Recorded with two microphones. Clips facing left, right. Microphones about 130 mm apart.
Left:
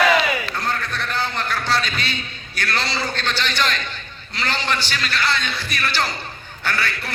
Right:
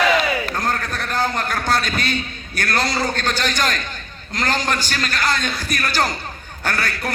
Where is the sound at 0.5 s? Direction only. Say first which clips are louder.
Right 2 dB; 45° right (ahead or behind).